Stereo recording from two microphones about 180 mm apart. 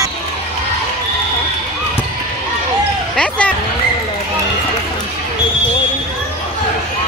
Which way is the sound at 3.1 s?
5° left (ahead or behind).